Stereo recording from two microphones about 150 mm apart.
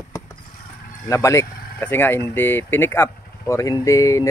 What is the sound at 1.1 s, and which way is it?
Speech, 20° left (ahead or behind).